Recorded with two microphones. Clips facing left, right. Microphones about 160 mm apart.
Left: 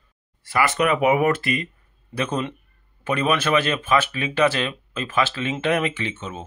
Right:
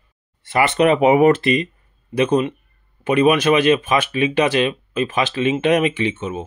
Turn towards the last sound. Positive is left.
turn(degrees=-15)  # may be behind; listen again after turning